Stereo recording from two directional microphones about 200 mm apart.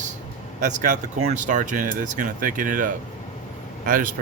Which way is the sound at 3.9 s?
45° right (ahead or behind).